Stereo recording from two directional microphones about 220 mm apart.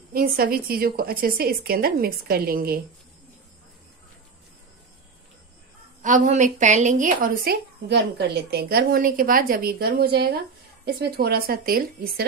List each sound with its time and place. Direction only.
0.1 s a woman's voice: 40° right (ahead or behind)
6.0 s a woman's voice: 35° right (ahead or behind)